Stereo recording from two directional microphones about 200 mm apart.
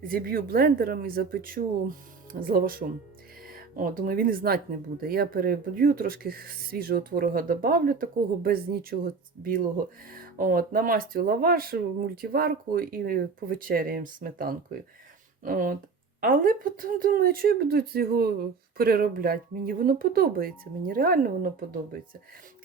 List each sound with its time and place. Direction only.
0.1 s speech: 45° right (ahead or behind)